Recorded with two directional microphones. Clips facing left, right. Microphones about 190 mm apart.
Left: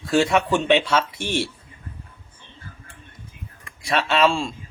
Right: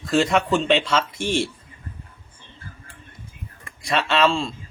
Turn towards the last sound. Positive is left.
turn(degrees=10)  # may be behind; listen again after turning